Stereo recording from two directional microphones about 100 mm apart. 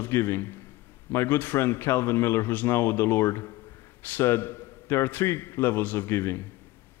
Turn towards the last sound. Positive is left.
turn(degrees=25)  # may be behind; listen again after turning